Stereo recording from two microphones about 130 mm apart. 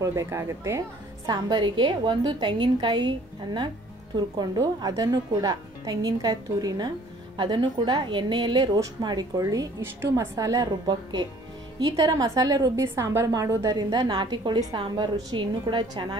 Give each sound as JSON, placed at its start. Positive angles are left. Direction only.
{"t": 0.0, "sound": "a woman's voice", "side_deg": -20}